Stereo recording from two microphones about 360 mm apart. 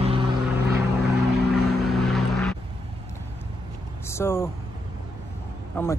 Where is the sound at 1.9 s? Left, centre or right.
Centre.